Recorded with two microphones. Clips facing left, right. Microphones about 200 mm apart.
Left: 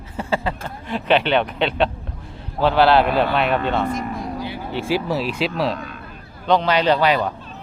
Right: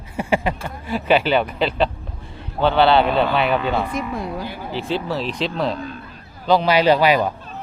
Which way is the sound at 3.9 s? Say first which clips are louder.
Even; 60° right (ahead or behind).